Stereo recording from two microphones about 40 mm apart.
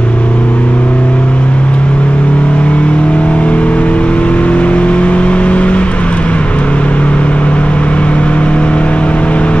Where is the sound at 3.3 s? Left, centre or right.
Left.